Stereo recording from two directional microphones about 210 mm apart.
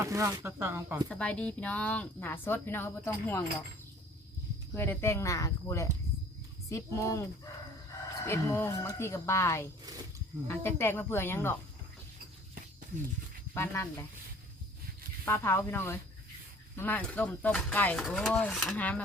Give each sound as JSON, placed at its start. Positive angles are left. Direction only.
{"t": 0.0, "sound": "speech", "side_deg": -15}
{"t": 1.0, "sound": "a woman's voice", "side_deg": 5}
{"t": 4.7, "sound": "a woman's voice", "side_deg": 10}
{"t": 13.5, "sound": "a woman's voice", "side_deg": 10}
{"t": 15.2, "sound": "a woman's voice", "side_deg": 10}